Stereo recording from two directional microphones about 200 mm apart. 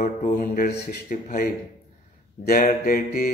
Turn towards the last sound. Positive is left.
turn(degrees=50)  # may be behind; listen again after turning